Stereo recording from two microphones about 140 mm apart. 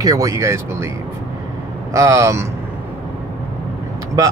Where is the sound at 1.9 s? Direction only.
20° right (ahead or behind).